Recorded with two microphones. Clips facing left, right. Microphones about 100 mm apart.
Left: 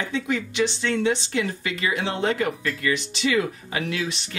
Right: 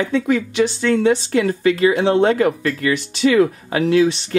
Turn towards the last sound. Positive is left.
turn(degrees=-40)  # may be behind; listen again after turning